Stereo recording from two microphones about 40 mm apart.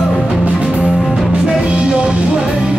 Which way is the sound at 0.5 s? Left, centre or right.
Right.